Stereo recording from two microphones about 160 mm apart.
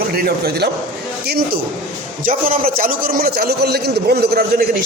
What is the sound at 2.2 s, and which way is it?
A man's voice, 60° right (ahead or behind).